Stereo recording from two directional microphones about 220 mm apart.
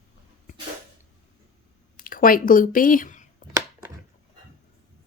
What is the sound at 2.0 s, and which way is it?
Speech, 40° left (ahead or behind).